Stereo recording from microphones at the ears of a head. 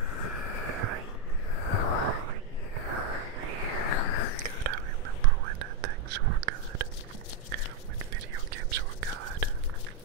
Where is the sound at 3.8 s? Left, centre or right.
Left.